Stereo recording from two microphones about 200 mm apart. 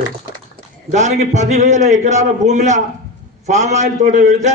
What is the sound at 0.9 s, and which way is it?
A man's voice, 35° right (ahead or behind).